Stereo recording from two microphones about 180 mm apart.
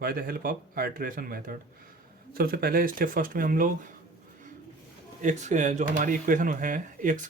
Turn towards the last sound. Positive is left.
turn(degrees=-45)  # may be behind; listen again after turning